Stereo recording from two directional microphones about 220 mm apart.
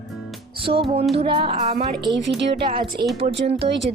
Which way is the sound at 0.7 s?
25° right (ahead or behind).